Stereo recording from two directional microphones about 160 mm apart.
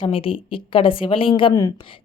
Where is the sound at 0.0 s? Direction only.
35° left (ahead or behind).